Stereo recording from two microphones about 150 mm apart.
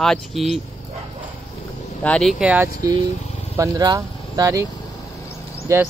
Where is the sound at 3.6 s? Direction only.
25° right (ahead or behind).